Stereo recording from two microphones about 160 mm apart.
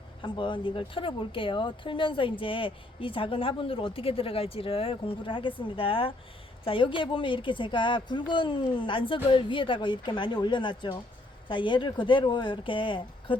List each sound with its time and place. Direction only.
0.2 s speech: 30° left (ahead or behind)